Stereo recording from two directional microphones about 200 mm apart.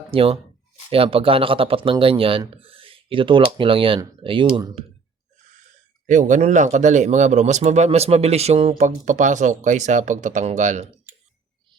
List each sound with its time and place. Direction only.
0.1 s speech: 30° right (ahead or behind)
6.1 s a man's voice: 40° right (ahead or behind)